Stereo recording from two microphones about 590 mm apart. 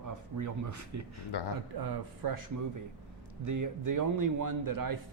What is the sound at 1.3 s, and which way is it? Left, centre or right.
Speech, left.